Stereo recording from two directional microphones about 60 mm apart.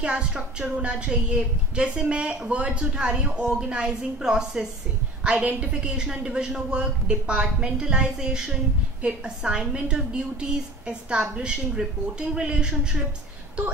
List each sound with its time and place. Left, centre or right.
0.0 s a woman's voice: centre